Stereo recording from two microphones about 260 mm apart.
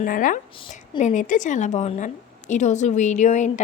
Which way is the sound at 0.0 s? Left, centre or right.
Left.